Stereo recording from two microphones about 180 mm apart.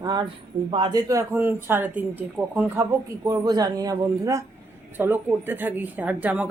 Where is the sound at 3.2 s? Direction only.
20° right (ahead or behind).